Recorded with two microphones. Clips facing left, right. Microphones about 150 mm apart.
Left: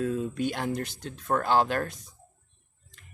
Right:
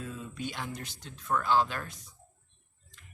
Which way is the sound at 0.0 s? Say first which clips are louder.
Left 10 dB; 55° left (ahead or behind).